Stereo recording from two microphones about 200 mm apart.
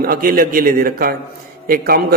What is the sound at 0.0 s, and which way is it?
A man's voice, 45° right (ahead or behind).